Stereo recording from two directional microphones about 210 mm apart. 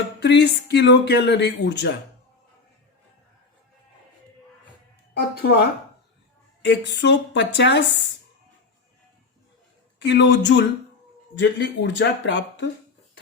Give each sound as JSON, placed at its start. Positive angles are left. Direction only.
{"t": 0.2, "sound": "speech", "side_deg": 55}
{"t": 5.4, "sound": "speech", "side_deg": 50}
{"t": 10.0, "sound": "speech", "side_deg": 55}